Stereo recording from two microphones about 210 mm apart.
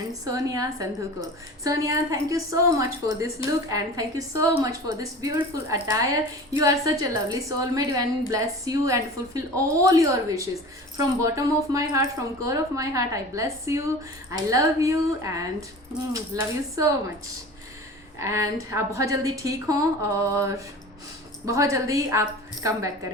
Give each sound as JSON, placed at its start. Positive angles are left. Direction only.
{"t": 0.1, "sound": "a woman's voice", "side_deg": -15}
{"t": 18.2, "sound": "a woman's voice", "side_deg": -15}